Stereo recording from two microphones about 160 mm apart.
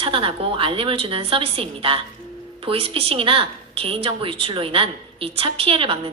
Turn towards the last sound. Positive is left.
turn(degrees=-35)  # may be behind; listen again after turning